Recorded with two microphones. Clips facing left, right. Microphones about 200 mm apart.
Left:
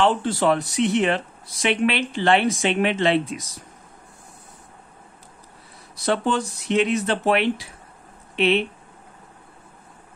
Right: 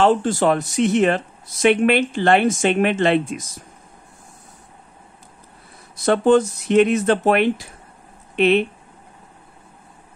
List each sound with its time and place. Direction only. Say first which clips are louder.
0.0 s speech: right 3 dB; 45° right (ahead or behind)
6.0 s speech: right 8 dB; 50° right (ahead or behind)